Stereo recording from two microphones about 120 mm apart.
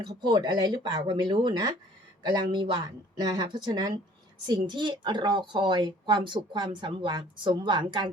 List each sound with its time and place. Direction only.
0.2 s a woman's voice: 35° right (ahead or behind)